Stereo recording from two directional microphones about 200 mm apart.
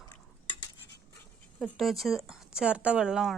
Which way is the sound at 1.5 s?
5° left (ahead or behind).